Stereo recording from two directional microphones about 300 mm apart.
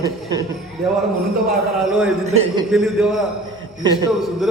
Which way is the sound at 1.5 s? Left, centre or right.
Centre.